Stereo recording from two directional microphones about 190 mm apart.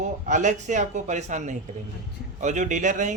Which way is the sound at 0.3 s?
40° right (ahead or behind).